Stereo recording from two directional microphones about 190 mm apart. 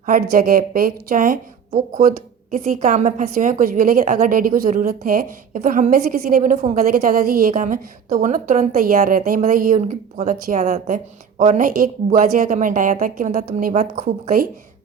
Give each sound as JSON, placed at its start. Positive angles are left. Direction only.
{"t": 0.0, "sound": "a woman's voice", "side_deg": -45}
{"t": 6.9, "sound": "a woman's voice", "side_deg": -50}